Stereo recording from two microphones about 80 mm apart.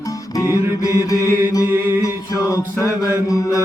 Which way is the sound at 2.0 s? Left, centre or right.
Left.